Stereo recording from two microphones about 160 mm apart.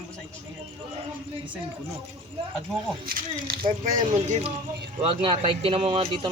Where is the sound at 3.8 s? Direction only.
50° right (ahead or behind).